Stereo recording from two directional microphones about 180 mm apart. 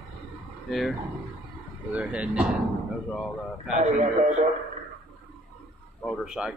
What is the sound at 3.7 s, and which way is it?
Speech, 45° right (ahead or behind).